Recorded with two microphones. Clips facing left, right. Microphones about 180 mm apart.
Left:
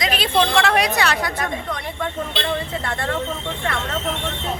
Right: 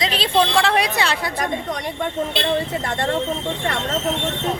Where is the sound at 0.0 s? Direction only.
30° right (ahead or behind).